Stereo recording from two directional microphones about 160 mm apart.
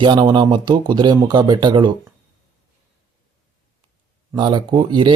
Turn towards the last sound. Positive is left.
turn(degrees=-30)  # may be behind; listen again after turning